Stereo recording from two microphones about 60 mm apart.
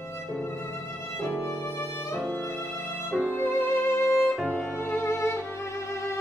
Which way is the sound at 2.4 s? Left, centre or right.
Left.